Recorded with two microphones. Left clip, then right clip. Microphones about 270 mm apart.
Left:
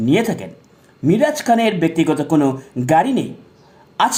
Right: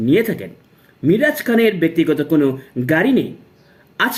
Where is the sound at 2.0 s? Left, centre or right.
Left.